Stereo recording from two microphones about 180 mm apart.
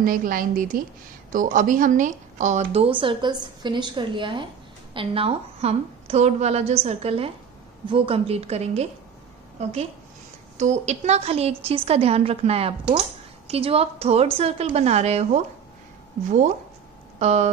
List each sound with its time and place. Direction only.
0.0 s a woman's voice: 50° right (ahead or behind)
17.2 s speech: 35° right (ahead or behind)